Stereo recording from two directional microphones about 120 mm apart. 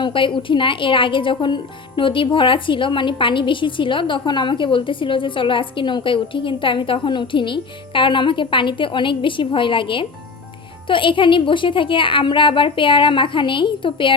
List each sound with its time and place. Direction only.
0.0 s a woman's voice: 45° left (ahead or behind)